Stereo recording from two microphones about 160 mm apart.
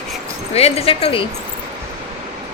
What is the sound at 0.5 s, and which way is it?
Speech, 40° left (ahead or behind).